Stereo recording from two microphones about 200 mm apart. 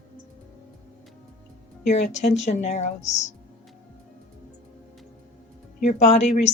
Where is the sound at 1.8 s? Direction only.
35° left (ahead or behind).